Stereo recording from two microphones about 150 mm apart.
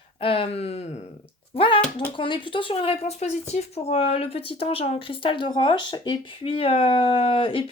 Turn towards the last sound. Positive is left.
turn(degrees=35)  # may be behind; listen again after turning